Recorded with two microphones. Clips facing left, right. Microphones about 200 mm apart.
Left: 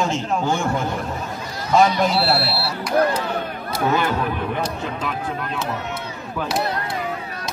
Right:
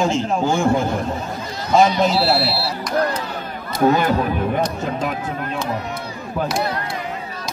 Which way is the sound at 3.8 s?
40° right (ahead or behind).